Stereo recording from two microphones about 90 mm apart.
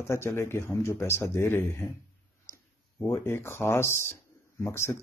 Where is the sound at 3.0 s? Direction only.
25° left (ahead or behind).